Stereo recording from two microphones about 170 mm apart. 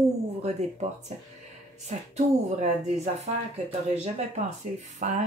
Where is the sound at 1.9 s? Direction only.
40° right (ahead or behind).